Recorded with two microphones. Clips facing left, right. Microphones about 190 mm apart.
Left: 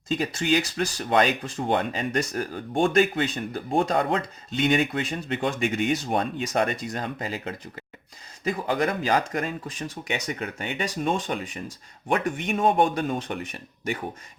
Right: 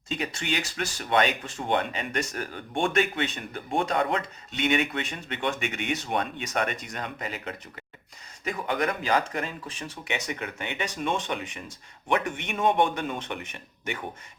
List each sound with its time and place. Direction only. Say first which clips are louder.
0.2 s speech: left 7 dB; 35° left (ahead or behind)